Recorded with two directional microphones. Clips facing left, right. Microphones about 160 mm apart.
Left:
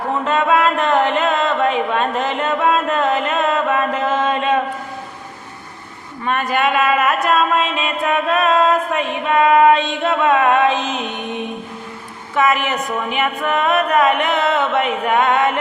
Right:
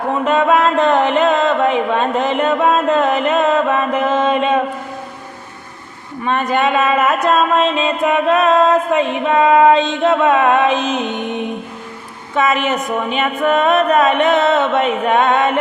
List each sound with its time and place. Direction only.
0.3 s music: 20° right (ahead or behind)
6.2 s music: 20° right (ahead or behind)